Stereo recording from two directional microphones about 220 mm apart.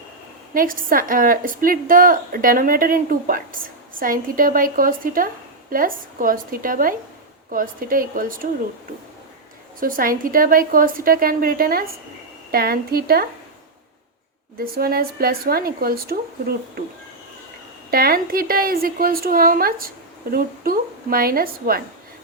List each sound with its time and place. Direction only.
0.5 s a woman's voice: 40° right (ahead or behind)
9.8 s a woman's voice: 40° right (ahead or behind)
14.6 s speech: 45° right (ahead or behind)
17.9 s a woman's voice: 45° right (ahead or behind)